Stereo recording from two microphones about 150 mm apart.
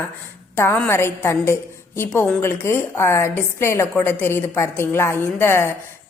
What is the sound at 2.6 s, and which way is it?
A woman's voice, 15° left (ahead or behind).